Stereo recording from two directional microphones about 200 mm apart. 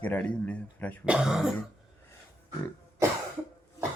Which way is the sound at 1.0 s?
5° right (ahead or behind).